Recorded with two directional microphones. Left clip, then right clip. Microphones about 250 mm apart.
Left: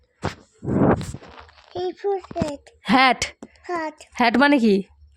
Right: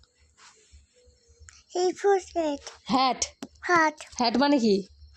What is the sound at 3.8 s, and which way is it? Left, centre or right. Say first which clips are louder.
Speech: right 7 dB; right.